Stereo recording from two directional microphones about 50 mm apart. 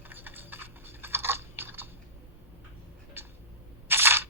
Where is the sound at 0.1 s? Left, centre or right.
Right.